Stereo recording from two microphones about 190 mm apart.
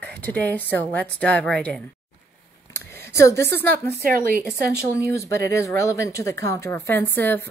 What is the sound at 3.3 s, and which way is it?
A woman's voice, 60° right (ahead or behind).